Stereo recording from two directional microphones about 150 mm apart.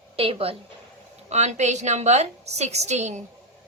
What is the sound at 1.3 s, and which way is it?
A woman's voice, 50° right (ahead or behind).